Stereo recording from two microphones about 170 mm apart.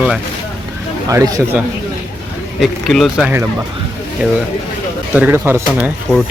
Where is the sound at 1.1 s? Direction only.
20° right (ahead or behind).